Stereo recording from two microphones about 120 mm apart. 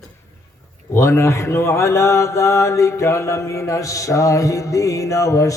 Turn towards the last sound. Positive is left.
turn(degrees=25)  # may be behind; listen again after turning